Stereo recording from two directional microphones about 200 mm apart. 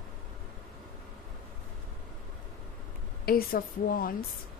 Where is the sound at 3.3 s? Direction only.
50° left (ahead or behind).